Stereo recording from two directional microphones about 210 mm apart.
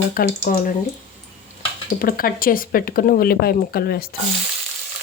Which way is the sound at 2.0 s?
40° left (ahead or behind).